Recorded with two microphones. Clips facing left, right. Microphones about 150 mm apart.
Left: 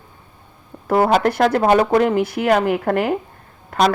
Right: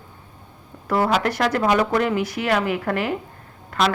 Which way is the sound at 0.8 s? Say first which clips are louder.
Left 5 dB; 50° left (ahead or behind).